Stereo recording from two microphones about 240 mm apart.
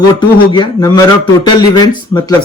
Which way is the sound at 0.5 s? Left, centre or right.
Centre.